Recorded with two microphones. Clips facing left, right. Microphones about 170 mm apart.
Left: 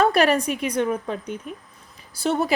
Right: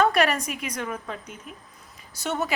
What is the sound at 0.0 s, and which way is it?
A woman's voice, 35° left (ahead or behind).